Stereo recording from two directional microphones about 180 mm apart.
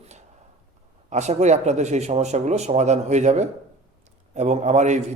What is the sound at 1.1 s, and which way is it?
A man's voice, 40° right (ahead or behind).